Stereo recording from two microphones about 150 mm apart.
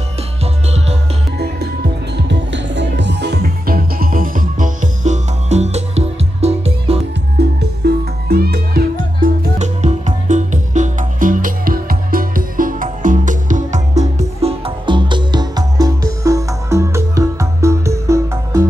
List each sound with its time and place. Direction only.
0.4 s music: 45° right (ahead or behind)
3.3 s music: 90° right; by 7.0 s 45° right (ahead or behind)
7.3 s music: 90° right; by 18.7 s 20° right (ahead or behind)